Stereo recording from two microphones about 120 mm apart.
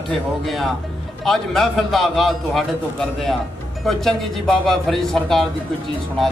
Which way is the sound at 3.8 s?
5° left (ahead or behind).